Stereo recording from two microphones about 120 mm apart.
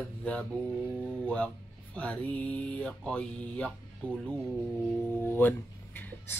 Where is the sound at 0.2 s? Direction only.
10° left (ahead or behind).